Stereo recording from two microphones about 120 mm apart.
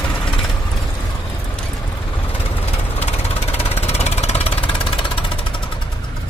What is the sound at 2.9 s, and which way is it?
Vehicle, 60° left (ahead or behind).